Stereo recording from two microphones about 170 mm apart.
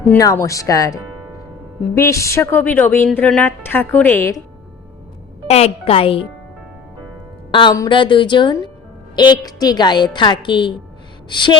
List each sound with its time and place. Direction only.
0.0 s a woman's voice: 20° left (ahead or behind)
2.0 s a woman's voice: 20° left (ahead or behind)
5.5 s a child's voice: 40° left (ahead or behind)
7.5 s a woman's voice: 25° left (ahead or behind)